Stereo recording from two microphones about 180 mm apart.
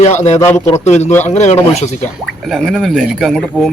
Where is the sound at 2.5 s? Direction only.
Centre (ahead or behind).